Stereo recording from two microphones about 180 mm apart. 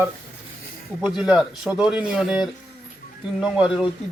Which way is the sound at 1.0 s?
Centre (ahead or behind).